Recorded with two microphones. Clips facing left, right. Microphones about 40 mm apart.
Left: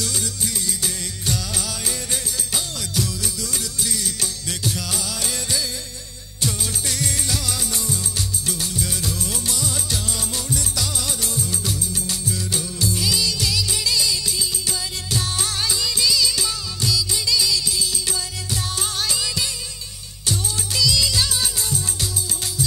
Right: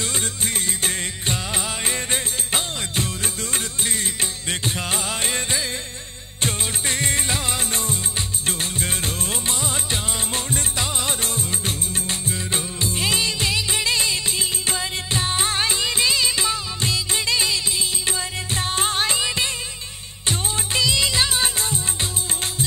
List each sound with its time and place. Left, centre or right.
0.0 s music: right
8.5 s music of bollywood: right
20.2 s music: right